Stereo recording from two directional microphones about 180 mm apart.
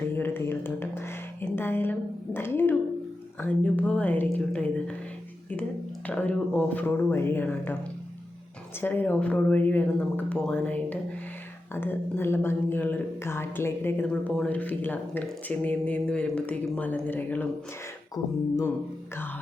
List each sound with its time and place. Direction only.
0.0 s a sound: 10° left (ahead or behind)
3.4 s speech: 10° left (ahead or behind)
6.1 s speech: 10° left (ahead or behind)
8.8 s speech: 10° left (ahead or behind)
18.1 s beatboxing: 20° left (ahead or behind)